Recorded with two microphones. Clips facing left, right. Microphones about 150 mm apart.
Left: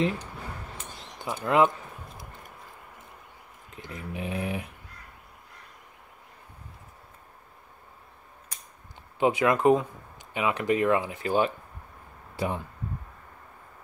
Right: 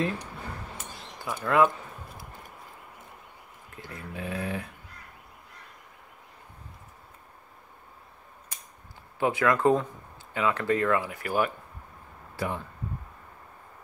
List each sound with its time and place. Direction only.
1.2 s speech: 20° left (ahead or behind)
3.7 s speech: 20° left (ahead or behind)
9.2 s speech: 20° left (ahead or behind)